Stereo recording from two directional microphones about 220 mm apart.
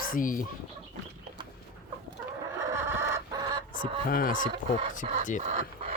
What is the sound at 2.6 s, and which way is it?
Chicken, 15° right (ahead or behind).